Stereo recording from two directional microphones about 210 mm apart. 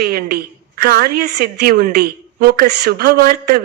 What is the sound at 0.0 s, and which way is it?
A woman's voice, 45° right (ahead or behind).